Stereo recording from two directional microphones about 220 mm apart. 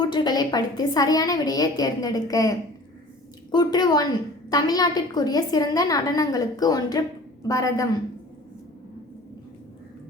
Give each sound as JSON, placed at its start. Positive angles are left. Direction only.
{"t": 0.0, "sound": "a woman's voice", "side_deg": 20}